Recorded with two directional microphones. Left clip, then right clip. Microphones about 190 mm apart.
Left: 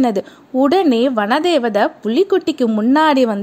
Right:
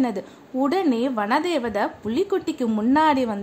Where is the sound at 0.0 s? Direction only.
40° left (ahead or behind).